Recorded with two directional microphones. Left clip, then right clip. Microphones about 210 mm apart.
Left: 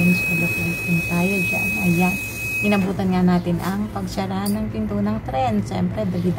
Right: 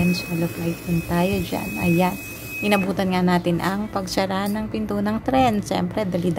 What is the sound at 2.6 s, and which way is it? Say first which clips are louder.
Speech: right 3 dB; 35° right (ahead or behind).